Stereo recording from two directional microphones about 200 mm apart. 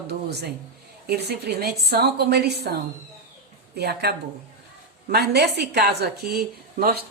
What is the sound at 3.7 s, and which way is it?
A woman's voice, 55° right (ahead or behind).